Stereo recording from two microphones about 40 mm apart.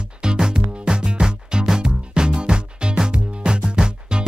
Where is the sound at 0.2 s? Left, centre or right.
Right.